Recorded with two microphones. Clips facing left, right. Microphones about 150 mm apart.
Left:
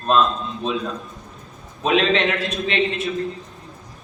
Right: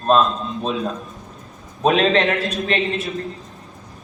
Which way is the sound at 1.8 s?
40° right (ahead or behind).